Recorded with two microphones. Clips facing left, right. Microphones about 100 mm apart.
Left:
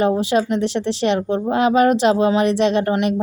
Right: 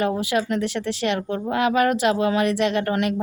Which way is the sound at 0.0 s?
25° left (ahead or behind).